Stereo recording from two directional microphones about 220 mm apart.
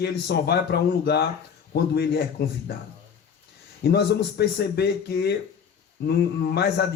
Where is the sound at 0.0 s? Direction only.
50° left (ahead or behind).